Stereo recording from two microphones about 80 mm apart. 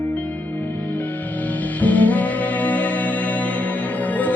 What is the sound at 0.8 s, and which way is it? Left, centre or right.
Music, left.